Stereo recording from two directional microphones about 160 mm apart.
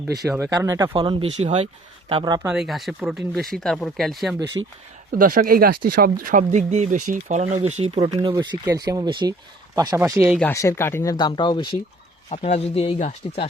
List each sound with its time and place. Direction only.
0.2 s speech: 20° right (ahead or behind)
0.9 s speech: 35° right (ahead or behind)
2.5 s speech: centre (ahead or behind)
4.6 s speech: 20° right (ahead or behind)
5.2 s speech: 60° right (ahead or behind); by 8.0 s 45° right (ahead or behind)
8.0 s speech: 25° right (ahead or behind)
10.4 s speech: 20° left (ahead or behind)
12.3 s speech: 40° left (ahead or behind)